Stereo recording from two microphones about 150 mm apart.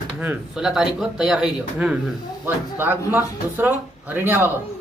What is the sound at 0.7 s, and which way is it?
Speech, centre (ahead or behind).